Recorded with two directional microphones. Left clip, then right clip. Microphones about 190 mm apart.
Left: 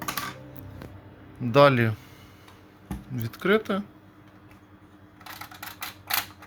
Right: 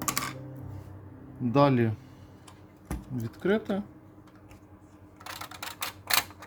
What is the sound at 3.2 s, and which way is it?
Speech, 5° right (ahead or behind).